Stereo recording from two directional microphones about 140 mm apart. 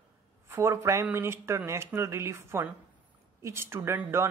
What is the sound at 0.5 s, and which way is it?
Speech, 20° right (ahead or behind).